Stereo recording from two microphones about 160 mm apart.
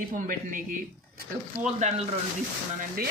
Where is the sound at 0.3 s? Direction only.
55° right (ahead or behind).